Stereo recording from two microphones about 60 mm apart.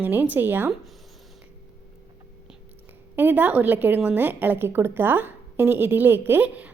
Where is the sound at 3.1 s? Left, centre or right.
Right.